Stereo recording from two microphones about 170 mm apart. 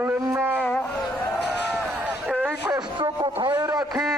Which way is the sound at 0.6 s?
10° left (ahead or behind).